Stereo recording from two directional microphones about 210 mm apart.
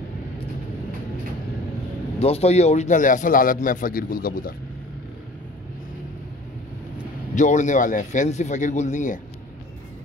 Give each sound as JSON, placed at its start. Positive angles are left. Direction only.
{"t": 2.1, "sound": "a man's voice", "side_deg": 30}
{"t": 7.3, "sound": "a man's voice", "side_deg": 35}